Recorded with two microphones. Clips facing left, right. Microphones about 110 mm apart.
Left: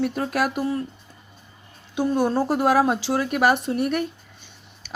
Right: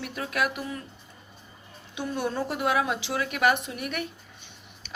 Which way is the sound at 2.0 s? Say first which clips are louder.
Left 8 dB; 35° left (ahead or behind).